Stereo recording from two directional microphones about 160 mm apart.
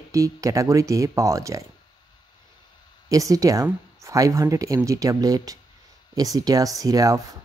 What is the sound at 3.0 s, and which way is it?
A woman's voice, 20° right (ahead or behind).